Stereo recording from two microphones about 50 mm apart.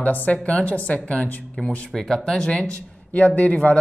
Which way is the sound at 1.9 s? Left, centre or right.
Centre.